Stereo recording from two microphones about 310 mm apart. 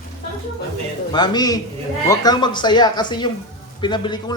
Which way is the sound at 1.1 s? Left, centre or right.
Centre.